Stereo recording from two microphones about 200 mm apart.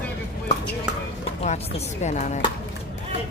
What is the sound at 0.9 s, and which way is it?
Speech, 5° right (ahead or behind).